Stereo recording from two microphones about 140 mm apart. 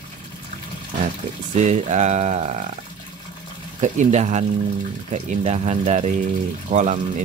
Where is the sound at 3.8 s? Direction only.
55° right (ahead or behind).